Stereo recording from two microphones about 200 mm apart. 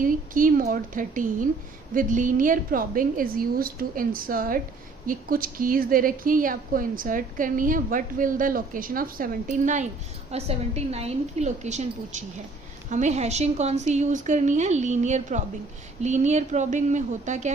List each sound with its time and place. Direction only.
0.0 s a woman's voice: 45° right (ahead or behind)